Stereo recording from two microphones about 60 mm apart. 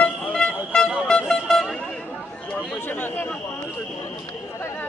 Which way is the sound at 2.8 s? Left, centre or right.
Left.